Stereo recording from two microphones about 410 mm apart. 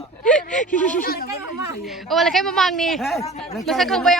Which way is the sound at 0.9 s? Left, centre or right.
Left.